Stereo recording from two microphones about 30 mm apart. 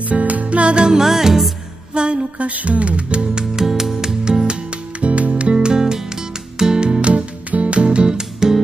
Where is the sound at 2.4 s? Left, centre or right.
Right.